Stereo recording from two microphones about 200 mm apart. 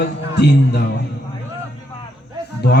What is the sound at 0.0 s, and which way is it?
Speech, 55° left (ahead or behind).